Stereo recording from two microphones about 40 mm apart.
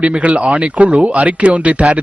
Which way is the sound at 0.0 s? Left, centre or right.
Right.